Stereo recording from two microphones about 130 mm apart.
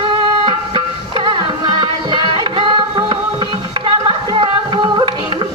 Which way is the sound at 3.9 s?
40° right (ahead or behind).